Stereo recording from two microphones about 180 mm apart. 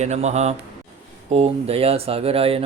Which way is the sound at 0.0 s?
40° right (ahead or behind).